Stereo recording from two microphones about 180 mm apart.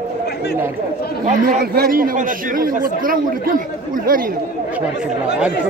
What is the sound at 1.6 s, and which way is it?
Speech, 55° right (ahead or behind).